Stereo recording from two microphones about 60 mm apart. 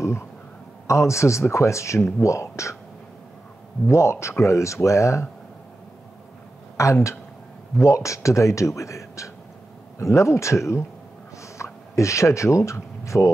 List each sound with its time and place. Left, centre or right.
0.8 s speech: left
3.8 s speech: left
6.8 s speech: left
11.4 s a sound: left